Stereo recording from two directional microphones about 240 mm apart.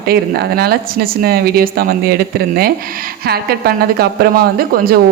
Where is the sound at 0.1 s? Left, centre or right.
Right.